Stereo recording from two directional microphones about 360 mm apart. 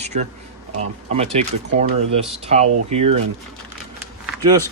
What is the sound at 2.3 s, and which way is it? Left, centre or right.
Speech, centre.